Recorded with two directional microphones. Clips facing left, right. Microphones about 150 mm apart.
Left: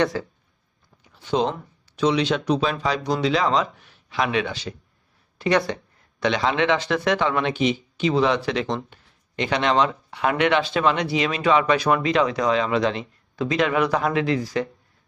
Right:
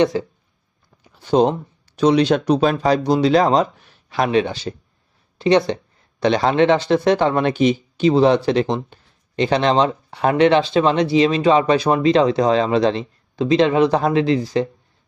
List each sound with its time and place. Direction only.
0.0 s speech: 20° right (ahead or behind)
1.2 s speech: 40° right (ahead or behind)